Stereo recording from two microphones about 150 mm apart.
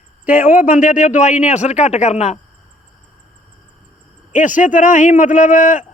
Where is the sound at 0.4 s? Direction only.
65° left (ahead or behind); by 2.4 s 50° left (ahead or behind).